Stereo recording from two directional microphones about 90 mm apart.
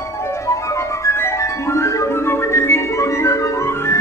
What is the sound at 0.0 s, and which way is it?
Music, 30° left (ahead or behind).